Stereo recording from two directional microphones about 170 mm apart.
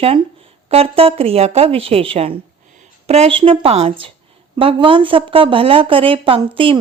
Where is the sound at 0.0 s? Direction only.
35° right (ahead or behind).